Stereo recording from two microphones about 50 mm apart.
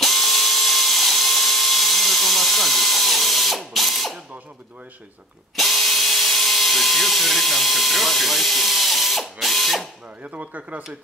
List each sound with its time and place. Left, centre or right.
0.0 s drill: centre
5.6 s drill: centre
10.2 s speech: right